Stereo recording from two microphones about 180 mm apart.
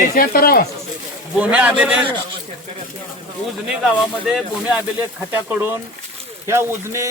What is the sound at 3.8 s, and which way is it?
Speech, centre (ahead or behind).